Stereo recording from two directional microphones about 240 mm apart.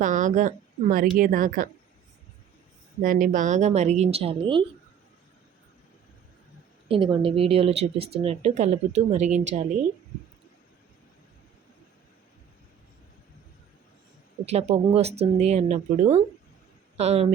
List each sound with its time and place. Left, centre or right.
0.0 s a woman's voice: right
3.0 s speech: right
6.8 s speech: right
14.4 s speech: right